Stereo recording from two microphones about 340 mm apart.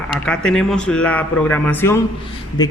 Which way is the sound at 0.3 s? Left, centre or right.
Centre.